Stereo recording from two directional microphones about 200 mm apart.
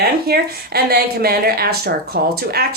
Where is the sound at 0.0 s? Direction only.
50° right (ahead or behind).